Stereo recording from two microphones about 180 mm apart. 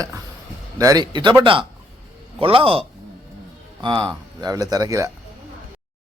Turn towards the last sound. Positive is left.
turn(degrees=-20)  # may be behind; listen again after turning